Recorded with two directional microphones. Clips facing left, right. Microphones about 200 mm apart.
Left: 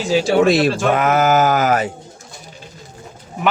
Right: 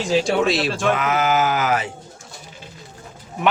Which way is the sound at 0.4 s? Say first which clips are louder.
Left 7 dB; 50° left (ahead or behind).